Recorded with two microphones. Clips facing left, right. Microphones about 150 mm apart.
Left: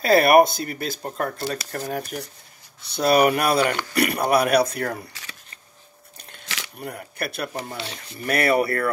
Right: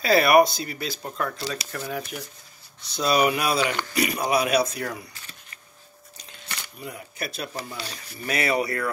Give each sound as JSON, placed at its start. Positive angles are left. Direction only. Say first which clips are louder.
{"t": 0.0, "sound": "speech", "louder": "left 2 dB", "side_deg": 50}
{"t": 2.9, "sound": "speech", "louder": "left 4 dB", "side_deg": 55}
{"t": 6.1, "sound": "a sound", "louder": "left 2 dB", "side_deg": 85}
{"t": 7.7, "sound": "speech", "louder": "left 3 dB", "side_deg": 25}
{"t": 8.3, "sound": "speech", "louder": "left 4 dB", "side_deg": 55}